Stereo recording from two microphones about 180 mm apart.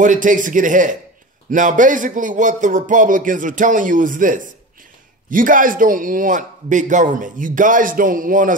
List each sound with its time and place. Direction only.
0.0 s a man's voice: 45° right (ahead or behind)